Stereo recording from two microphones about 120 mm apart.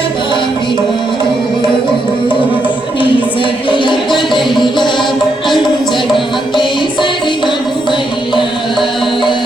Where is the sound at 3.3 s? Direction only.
45° left (ahead or behind).